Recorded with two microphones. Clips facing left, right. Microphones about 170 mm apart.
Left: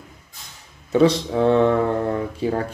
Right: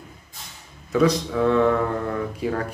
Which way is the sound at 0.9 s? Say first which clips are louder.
Left 3 dB; 30° left (ahead or behind).